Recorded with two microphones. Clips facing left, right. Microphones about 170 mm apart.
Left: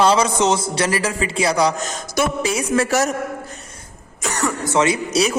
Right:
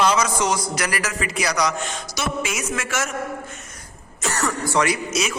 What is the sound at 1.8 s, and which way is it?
Speech, 45° left (ahead or behind).